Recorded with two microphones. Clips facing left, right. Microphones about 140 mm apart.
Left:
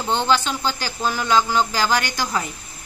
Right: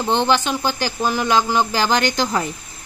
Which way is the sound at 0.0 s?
15° right (ahead or behind).